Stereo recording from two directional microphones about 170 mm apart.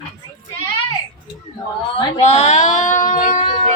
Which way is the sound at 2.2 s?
40° left (ahead or behind).